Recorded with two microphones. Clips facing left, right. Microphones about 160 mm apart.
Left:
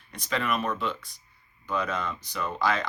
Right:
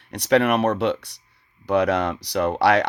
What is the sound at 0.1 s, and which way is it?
Speech, 70° right (ahead or behind).